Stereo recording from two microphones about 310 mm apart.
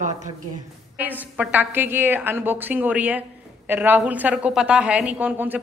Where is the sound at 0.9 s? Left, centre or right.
Centre.